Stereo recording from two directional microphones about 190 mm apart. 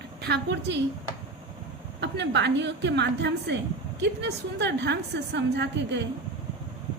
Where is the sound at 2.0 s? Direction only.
65° right (ahead or behind).